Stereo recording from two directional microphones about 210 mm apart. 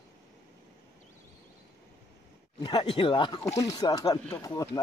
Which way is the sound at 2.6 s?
25° left (ahead or behind).